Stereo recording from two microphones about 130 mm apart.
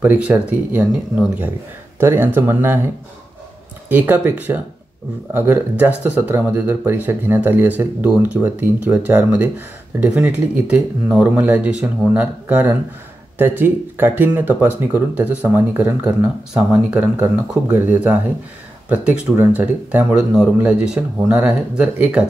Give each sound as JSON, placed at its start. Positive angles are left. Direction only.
{"t": 0.0, "sound": "speech", "side_deg": -15}
{"t": 2.0, "sound": "speech", "side_deg": -20}
{"t": 3.9, "sound": "speech", "side_deg": -15}
{"t": 19.3, "sound": "speech", "side_deg": -15}